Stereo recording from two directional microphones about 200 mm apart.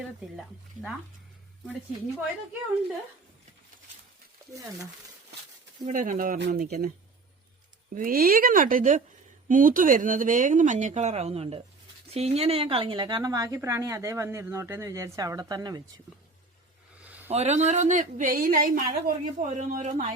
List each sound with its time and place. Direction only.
4.5 s a woman's voice: 15° right (ahead or behind)
5.8 s speech: 40° right (ahead or behind)
7.9 s a woman's voice: 45° right (ahead or behind); by 15.8 s 20° right (ahead or behind)
17.0 s a sound: 10° right (ahead or behind)
17.3 s speech: 35° right (ahead or behind)